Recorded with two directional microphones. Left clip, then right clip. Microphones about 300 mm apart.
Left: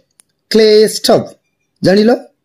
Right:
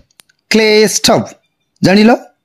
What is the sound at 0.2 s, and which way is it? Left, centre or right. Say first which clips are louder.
Speech: left 2 dB; right.